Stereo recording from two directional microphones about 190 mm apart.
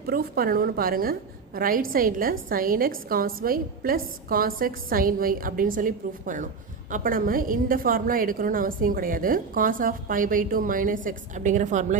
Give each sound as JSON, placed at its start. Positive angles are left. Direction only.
{"t": 0.0, "sound": "a woman's voice", "side_deg": -50}